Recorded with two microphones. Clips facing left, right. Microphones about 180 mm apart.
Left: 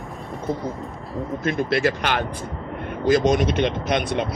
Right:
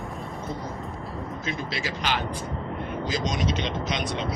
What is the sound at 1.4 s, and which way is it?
Speech, 60° left (ahead or behind).